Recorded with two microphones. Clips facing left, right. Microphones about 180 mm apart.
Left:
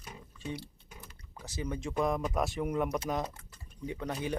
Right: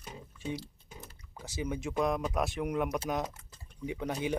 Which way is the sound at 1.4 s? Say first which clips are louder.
Right 1 dB; 10° right (ahead or behind).